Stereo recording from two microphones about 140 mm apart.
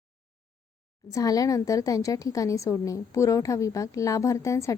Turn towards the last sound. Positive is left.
turn(degrees=20)  # may be behind; listen again after turning